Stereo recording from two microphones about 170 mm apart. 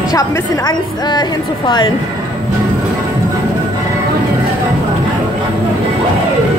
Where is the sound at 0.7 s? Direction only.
25° left (ahead or behind).